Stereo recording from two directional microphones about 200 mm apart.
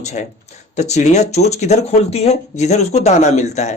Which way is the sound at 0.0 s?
35° left (ahead or behind).